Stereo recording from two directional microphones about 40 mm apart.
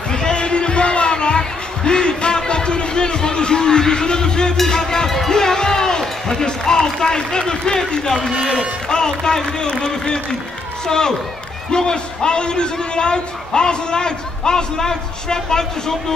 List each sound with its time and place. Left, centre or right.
0.1 s a sound: left
4.6 s music: centre
8.1 s speech: centre
8.8 s a man's voice: centre